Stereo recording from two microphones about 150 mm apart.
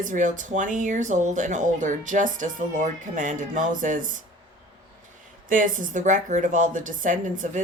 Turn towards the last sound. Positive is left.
turn(degrees=-60)  # may be behind; listen again after turning